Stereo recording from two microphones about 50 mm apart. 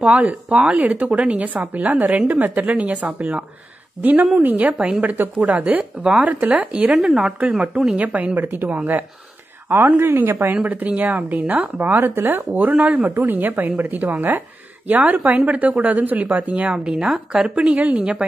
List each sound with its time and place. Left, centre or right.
0.0 s a woman's voice: right
4.7 s a woman's voice: centre
5.0 s a woman's voice: right
6.9 s speech: centre
7.3 s a woman's voice: right
10.5 s a woman's voice: right
16.7 s speech: centre